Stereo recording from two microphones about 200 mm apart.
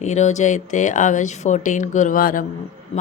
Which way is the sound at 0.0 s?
35° left (ahead or behind).